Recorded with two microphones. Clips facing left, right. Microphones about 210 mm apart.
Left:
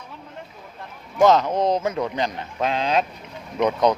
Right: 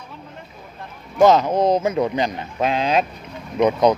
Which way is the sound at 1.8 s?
15° right (ahead or behind).